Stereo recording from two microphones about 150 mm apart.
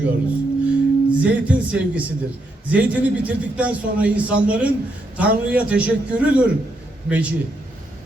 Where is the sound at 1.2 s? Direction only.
10° right (ahead or behind).